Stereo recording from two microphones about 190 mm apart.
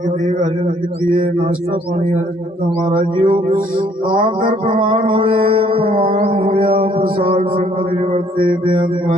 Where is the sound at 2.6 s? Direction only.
25° right (ahead or behind).